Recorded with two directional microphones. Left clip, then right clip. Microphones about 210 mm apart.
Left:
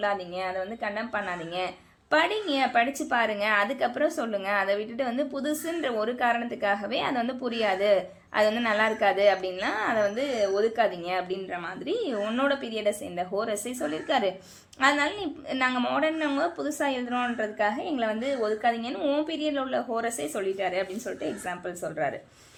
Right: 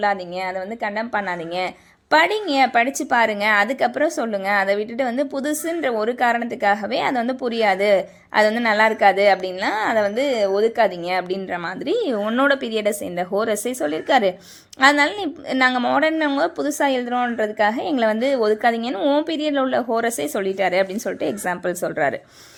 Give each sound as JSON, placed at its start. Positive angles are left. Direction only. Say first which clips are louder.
{"t": 0.0, "sound": "speech", "louder": "right 7 dB", "side_deg": -30}